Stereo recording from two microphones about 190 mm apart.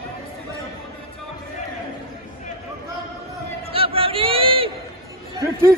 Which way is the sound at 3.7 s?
30° right (ahead or behind).